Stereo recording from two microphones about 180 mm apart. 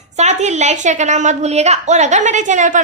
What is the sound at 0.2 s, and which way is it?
A woman's voice, 40° right (ahead or behind).